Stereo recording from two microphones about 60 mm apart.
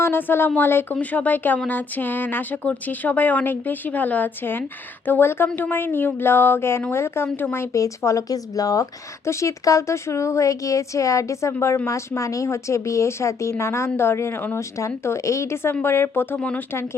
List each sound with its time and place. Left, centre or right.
0.0 s a woman's voice: left
7.7 s speech: left
9.2 s a woman's voice: left